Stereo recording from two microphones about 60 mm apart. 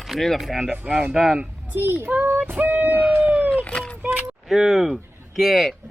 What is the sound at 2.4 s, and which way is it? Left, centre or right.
Speech, right.